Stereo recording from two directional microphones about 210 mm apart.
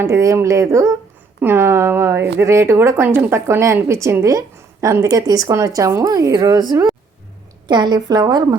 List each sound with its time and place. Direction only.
0.0 s a woman's voice: 15° right (ahead or behind)